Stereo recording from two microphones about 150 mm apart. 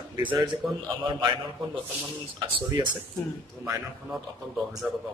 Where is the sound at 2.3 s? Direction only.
30° right (ahead or behind).